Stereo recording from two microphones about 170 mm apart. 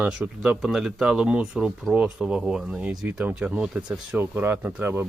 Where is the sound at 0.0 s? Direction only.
5° right (ahead or behind).